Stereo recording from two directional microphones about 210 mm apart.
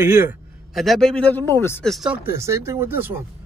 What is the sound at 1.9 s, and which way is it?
Speech, centre (ahead or behind).